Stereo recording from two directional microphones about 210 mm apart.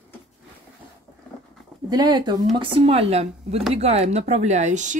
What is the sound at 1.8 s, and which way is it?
Speech, 20° right (ahead or behind).